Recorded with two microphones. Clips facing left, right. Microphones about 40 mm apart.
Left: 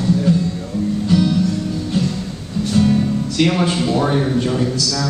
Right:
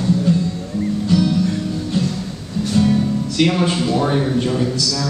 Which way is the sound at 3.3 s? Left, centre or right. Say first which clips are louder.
Even; centre.